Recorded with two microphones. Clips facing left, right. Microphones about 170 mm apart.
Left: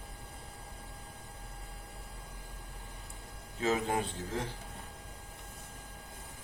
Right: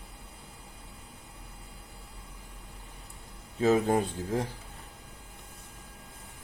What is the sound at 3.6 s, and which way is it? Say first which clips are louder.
Speech: right 7 dB; 40° right (ahead or behind).